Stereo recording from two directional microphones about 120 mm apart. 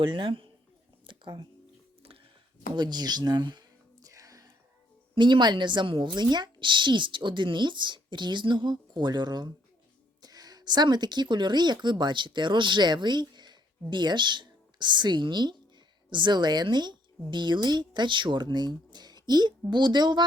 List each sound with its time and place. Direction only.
0.0 s speech: 45° right (ahead or behind)
2.7 s a woman's voice: 35° right (ahead or behind)
4.0 s whispering: 30° right (ahead or behind)
5.1 s a woman's voice: 40° right (ahead or behind)